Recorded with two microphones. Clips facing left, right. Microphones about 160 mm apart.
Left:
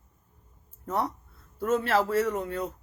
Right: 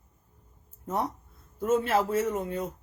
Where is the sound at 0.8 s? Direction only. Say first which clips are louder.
Left 1 dB; 15° right (ahead or behind).